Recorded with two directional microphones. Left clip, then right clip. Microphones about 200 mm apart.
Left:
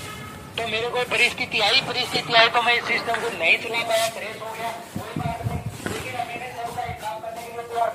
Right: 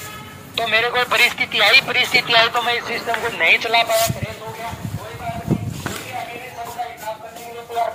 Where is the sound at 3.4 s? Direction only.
35° right (ahead or behind).